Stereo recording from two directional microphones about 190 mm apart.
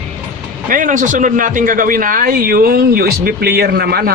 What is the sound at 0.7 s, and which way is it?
A man's voice, 45° right (ahead or behind).